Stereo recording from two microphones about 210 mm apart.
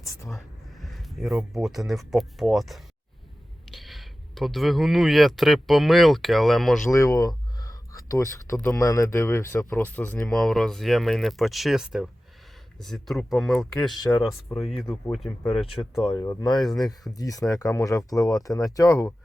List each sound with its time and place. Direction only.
0.0 s a sound: 15° left (ahead or behind)
0.3 s speech: centre (ahead or behind)
6.9 s a sound: 15° left (ahead or behind)
8.5 s speech: 5° left (ahead or behind)
8.8 s speech: 15° left (ahead or behind)
13.9 s speech: 20° left (ahead or behind)
14.2 s speech: centre (ahead or behind)
16.0 s speech: 20° left (ahead or behind)
16.6 s speech: centre (ahead or behind)
17.2 s speech: 15° left (ahead or behind)